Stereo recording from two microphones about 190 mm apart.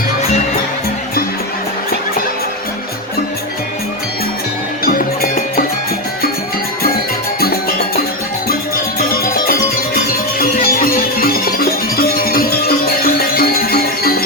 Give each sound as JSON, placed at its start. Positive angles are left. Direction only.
{"t": 4.9, "sound": "music", "side_deg": 50}
{"t": 7.3, "sound": "music", "side_deg": 55}
{"t": 9.5, "sound": "music", "side_deg": 50}